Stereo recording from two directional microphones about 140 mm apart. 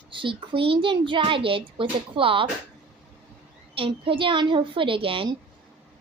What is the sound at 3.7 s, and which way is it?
A woman's voice, 40° right (ahead or behind).